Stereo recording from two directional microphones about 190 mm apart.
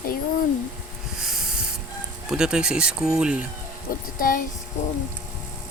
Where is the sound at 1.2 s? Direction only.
5° right (ahead or behind).